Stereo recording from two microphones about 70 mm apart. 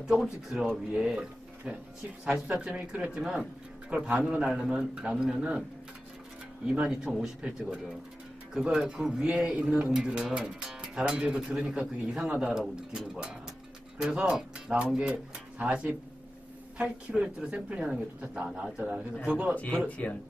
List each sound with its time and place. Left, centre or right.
0.0 s speech: centre
6.6 s speech: centre
20.0 s speech: centre